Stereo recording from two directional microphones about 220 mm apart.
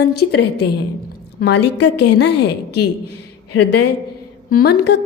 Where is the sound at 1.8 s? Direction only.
90° left.